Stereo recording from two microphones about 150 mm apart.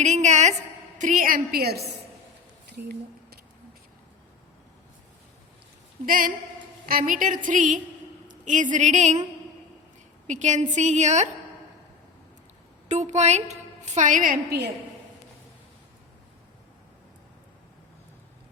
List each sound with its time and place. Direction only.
0.0 s a woman's voice: 50° right (ahead or behind); by 1.8 s 90° right
2.7 s a sound: 90° right
6.1 s a woman's voice: 65° right (ahead or behind)
10.2 s a woman's voice: 55° right (ahead or behind)
12.9 s a woman's voice: 50° right (ahead or behind); by 14.7 s 80° right